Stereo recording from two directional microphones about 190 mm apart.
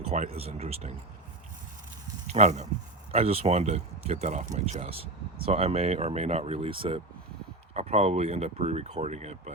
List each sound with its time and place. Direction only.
0.1 s speech: 35° right (ahead or behind)
2.2 s speech: 35° right (ahead or behind)